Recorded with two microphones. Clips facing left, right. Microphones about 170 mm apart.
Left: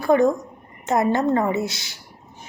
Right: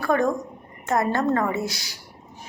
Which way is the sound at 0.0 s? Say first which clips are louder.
Left 4 dB; 20° left (ahead or behind).